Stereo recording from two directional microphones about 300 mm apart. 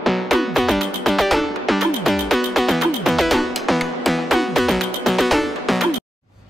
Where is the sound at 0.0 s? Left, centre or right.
Centre.